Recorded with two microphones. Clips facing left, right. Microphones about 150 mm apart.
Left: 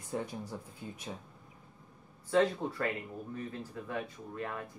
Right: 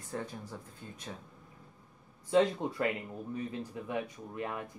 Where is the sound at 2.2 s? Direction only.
20° right (ahead or behind).